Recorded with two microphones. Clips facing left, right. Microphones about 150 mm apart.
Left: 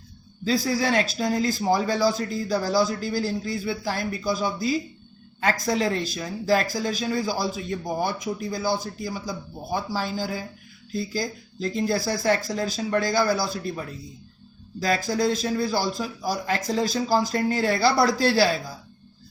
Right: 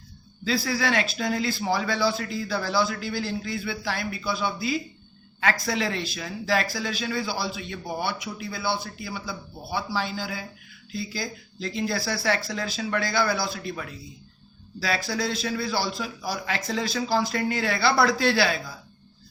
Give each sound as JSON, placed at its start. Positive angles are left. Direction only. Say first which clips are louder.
{"t": 0.4, "sound": "speech", "louder": "left 2 dB", "side_deg": 40}